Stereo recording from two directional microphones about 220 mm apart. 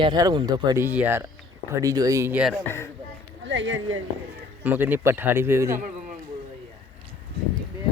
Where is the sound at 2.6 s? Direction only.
10° left (ahead or behind).